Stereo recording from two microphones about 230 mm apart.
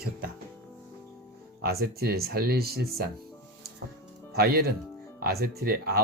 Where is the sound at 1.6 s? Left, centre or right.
Right.